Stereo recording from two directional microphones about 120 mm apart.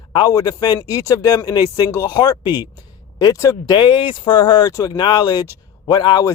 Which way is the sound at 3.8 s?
40° left (ahead or behind).